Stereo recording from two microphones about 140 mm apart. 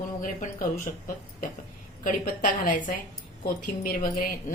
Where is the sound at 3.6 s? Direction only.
90° left.